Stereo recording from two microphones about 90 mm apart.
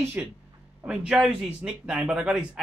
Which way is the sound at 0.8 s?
10° right (ahead or behind).